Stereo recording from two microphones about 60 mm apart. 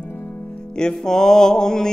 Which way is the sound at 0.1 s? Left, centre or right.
Left.